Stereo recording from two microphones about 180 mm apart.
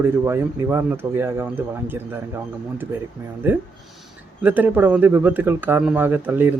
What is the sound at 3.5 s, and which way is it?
Speech, 10° right (ahead or behind).